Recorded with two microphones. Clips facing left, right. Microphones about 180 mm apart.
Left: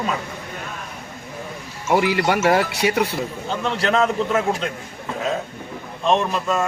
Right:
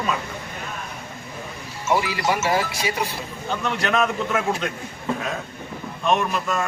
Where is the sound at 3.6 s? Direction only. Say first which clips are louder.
Left 3 dB; 30° left (ahead or behind).